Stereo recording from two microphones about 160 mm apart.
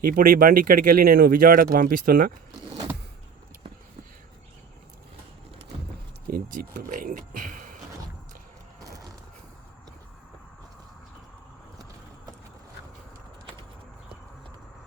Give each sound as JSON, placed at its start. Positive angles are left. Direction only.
{"t": 0.1, "sound": "speech", "side_deg": -65}
{"t": 6.2, "sound": "speech", "side_deg": -65}